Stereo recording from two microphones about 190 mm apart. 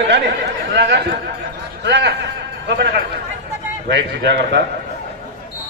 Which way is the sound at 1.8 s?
65° right (ahead or behind).